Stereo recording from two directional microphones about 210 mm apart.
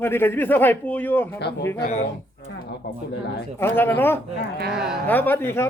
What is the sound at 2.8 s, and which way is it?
Speech, 50° left (ahead or behind).